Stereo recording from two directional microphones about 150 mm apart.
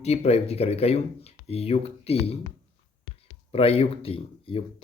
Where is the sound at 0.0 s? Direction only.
45° left (ahead or behind).